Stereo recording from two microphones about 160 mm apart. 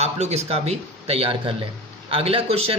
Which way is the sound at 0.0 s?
40° right (ahead or behind).